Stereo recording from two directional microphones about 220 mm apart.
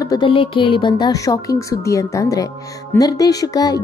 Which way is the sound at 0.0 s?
20° left (ahead or behind).